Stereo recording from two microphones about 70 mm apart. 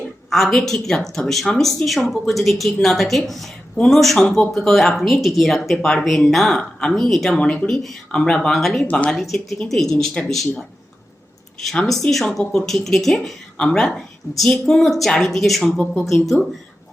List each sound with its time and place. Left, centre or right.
0.3 s speech: centre
6.6 s speech: centre
7.3 s speech: centre
7.7 s speech: centre
11.6 s speech: centre